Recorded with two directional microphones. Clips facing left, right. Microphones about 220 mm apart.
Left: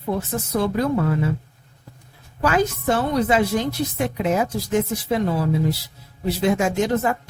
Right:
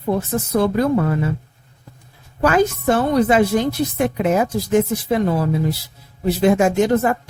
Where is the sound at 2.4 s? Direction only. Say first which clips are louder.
Right 4 dB; 50° right (ahead or behind).